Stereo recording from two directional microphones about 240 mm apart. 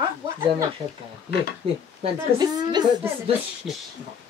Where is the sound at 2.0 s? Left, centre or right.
Centre.